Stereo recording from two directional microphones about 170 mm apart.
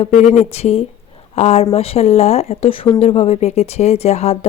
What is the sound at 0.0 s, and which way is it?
Speech, 40° left (ahead or behind).